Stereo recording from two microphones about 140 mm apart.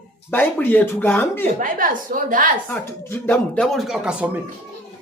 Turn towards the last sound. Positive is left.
turn(degrees=-5)  # may be behind; listen again after turning